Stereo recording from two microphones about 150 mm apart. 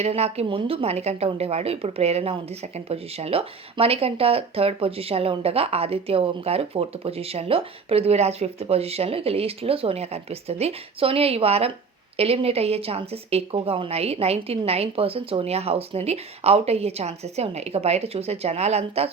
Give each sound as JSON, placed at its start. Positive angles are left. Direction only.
{"t": 0.0, "sound": "a woman's voice", "side_deg": -45}